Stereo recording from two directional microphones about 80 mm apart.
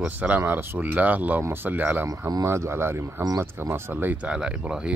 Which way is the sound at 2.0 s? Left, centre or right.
Right.